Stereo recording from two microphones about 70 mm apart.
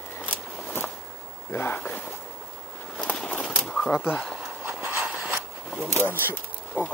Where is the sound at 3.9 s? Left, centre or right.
Left.